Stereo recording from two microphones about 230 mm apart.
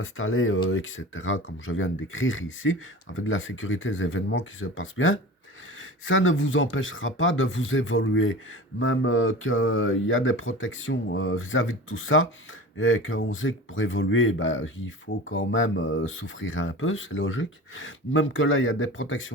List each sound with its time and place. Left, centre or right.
0.0 s speech: left